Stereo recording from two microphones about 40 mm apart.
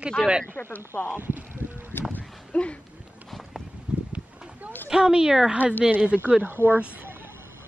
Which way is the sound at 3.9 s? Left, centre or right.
Right.